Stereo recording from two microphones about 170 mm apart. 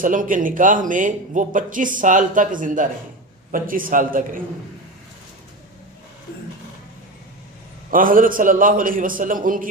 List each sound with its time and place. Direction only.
0.0 s a man's voice: 50° right (ahead or behind)
7.9 s speech: 55° right (ahead or behind)